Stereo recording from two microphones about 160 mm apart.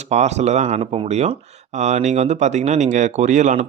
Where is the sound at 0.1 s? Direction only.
45° right (ahead or behind).